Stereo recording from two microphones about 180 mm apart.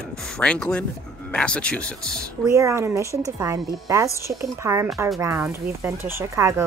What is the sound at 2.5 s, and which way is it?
Speech, 15° right (ahead or behind).